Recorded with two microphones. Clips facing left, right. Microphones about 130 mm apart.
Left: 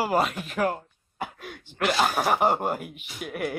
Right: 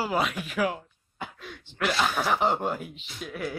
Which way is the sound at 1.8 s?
45° left (ahead or behind).